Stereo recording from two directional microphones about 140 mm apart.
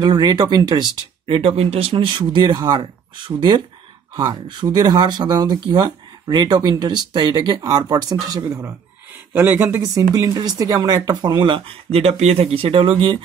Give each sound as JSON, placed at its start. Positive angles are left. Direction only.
{"t": 0.0, "sound": "speech", "side_deg": -30}